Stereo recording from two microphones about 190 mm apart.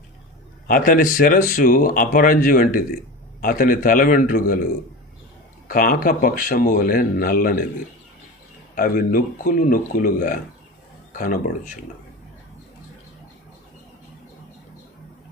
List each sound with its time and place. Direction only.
0.7 s speech: 50° left (ahead or behind)
8.7 s speech: 50° left (ahead or behind)
11.1 s a sound: 45° left (ahead or behind)